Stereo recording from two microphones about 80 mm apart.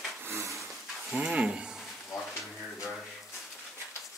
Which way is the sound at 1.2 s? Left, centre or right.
Centre.